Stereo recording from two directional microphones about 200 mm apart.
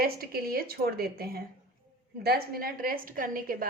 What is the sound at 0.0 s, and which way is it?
A woman's voice, 50° right (ahead or behind).